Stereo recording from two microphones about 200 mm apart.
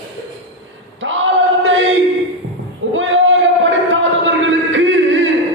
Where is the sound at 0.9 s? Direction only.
70° right (ahead or behind).